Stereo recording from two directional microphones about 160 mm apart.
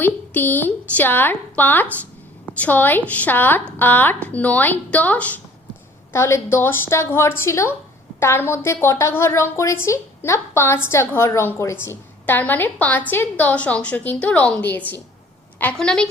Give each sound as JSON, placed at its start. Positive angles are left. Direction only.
{"t": 0.0, "sound": "a woman's voice", "side_deg": 10}